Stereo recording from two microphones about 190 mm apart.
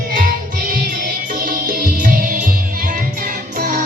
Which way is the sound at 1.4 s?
50° right (ahead or behind).